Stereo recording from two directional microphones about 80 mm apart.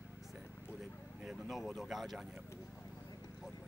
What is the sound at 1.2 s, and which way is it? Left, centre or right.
Speech, centre.